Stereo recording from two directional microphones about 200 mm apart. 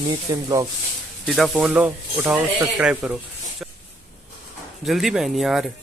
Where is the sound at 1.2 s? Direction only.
Centre (ahead or behind).